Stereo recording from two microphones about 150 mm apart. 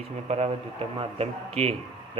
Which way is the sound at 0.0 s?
45° right (ahead or behind).